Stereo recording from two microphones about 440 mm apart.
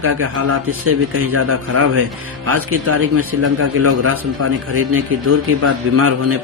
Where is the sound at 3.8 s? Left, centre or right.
Right.